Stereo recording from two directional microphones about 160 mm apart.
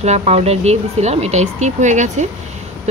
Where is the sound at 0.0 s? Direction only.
45° right (ahead or behind).